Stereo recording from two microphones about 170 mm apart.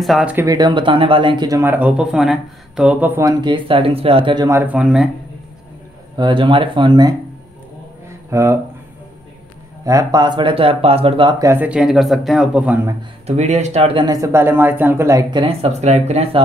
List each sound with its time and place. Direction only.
0.0 s speech: 5° right (ahead or behind)
0.5 s speech: 25° right (ahead or behind)
1.6 s speech: 10° right (ahead or behind); by 4.5 s 30° right (ahead or behind)
4.5 s speech: 10° right (ahead or behind)
6.1 s speech: 25° right (ahead or behind)
8.3 s speech: 15° right (ahead or behind)
9.8 s speech: 20° right (ahead or behind)
13.4 s speech: 40° right (ahead or behind)
14.0 s speech: 20° right (ahead or behind)
15.4 s speech: 40° right (ahead or behind)